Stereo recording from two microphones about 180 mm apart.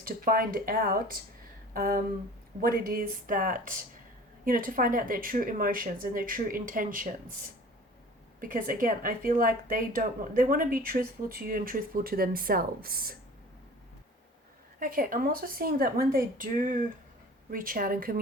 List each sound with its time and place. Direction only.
0.0 s a woman's voice: 55° right (ahead or behind)
8.4 s a woman's voice: 50° right (ahead or behind)
14.8 s a woman's voice: 50° right (ahead or behind)